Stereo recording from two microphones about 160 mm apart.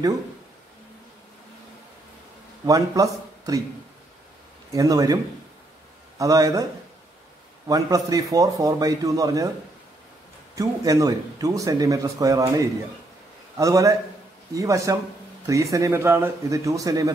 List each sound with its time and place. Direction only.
2.6 s speech: 20° right (ahead or behind)
4.7 s speech: 20° right (ahead or behind)
10.5 s speech: 20° right (ahead or behind)